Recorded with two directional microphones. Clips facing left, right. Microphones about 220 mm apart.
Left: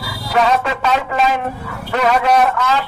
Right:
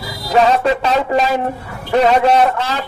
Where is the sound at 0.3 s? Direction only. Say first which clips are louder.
Right 3 dB; 30° right (ahead or behind).